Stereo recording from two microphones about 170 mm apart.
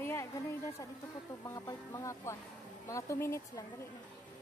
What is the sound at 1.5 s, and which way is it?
Speech, 20° left (ahead or behind).